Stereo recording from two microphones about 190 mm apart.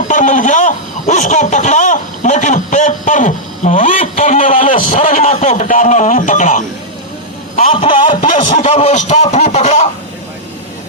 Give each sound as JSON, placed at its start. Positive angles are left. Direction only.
{"t": 0.1, "sound": "speech", "side_deg": 40}
{"t": 7.7, "sound": "a man's voice", "side_deg": 25}
{"t": 8.2, "sound": "speech", "side_deg": 40}